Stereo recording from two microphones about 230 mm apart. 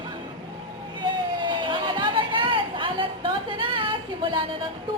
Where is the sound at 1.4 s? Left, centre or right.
Centre.